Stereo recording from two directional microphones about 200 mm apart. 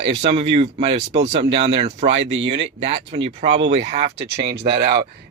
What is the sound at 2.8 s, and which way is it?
Speech, 30° right (ahead or behind).